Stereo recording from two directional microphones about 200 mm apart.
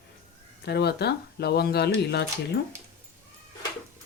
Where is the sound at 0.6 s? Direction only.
55° left (ahead or behind).